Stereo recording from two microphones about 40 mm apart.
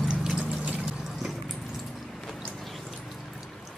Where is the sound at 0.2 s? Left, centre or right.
Centre.